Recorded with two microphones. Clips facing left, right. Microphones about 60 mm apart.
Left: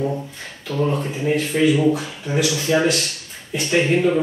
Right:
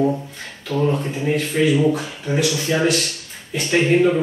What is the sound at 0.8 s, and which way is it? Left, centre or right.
Speech, centre.